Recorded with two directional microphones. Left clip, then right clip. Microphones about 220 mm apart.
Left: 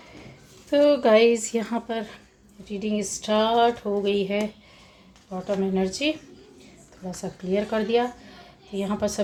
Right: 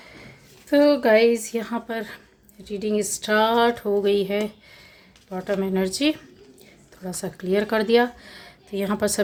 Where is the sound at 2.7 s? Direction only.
25° right (ahead or behind).